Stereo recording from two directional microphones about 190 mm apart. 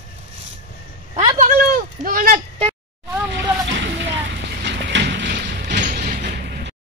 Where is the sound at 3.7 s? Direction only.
70° right (ahead or behind).